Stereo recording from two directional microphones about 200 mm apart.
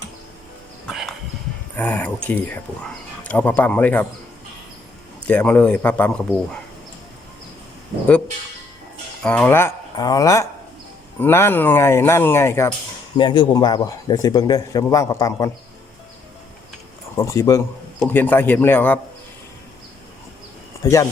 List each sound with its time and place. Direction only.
0.9 s a sound: centre (ahead or behind)
1.7 s speech: 10° left (ahead or behind)
5.3 s speech: 5° left (ahead or behind)
9.2 s speech: 5° left (ahead or behind)
13.1 s a man's voice: 25° left (ahead or behind)
17.2 s speech: 15° left (ahead or behind)
20.8 s speech: 15° left (ahead or behind)